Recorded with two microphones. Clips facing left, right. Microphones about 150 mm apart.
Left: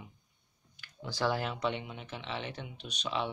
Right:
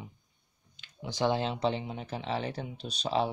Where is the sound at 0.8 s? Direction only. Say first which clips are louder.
Right 3 dB; 20° right (ahead or behind).